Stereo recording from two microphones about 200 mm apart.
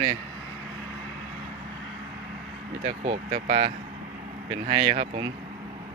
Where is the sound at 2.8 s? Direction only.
35° right (ahead or behind).